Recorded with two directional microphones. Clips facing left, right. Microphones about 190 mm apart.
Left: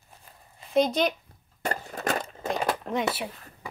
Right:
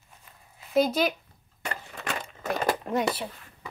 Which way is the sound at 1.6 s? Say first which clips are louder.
Left 6 dB; 40° left (ahead or behind).